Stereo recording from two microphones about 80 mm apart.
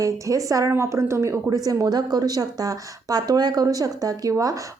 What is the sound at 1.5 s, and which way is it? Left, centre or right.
Speech, right.